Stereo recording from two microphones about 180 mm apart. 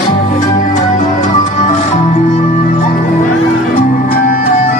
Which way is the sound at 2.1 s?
45° left (ahead or behind).